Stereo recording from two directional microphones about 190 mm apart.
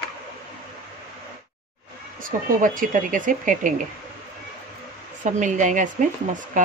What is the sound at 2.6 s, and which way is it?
Speech, 45° right (ahead or behind).